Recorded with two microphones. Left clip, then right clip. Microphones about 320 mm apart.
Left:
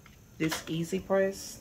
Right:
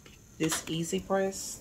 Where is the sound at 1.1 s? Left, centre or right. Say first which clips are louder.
Left 3 dB; left.